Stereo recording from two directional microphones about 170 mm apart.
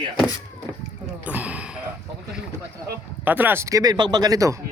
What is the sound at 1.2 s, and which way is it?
Gasp, 10° right (ahead or behind).